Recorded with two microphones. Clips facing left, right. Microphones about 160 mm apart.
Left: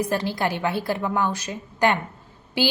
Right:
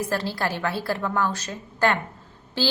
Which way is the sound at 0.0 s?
15° left (ahead or behind).